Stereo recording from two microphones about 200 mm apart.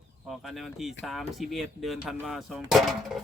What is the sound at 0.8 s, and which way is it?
Speech, centre (ahead or behind).